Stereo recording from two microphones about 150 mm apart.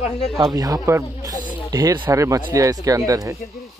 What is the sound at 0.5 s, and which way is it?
Speech, 20° right (ahead or behind).